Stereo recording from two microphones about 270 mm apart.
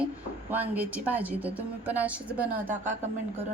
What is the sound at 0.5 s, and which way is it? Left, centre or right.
A woman's voice, centre.